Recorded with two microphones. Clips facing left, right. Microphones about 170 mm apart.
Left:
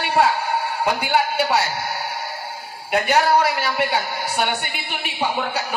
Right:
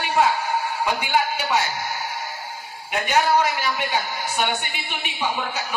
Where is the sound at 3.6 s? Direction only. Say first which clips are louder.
Left 3 dB; 65° left (ahead or behind).